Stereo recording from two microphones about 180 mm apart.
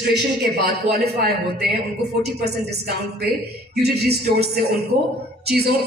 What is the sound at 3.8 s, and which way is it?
Music, 65° right (ahead or behind).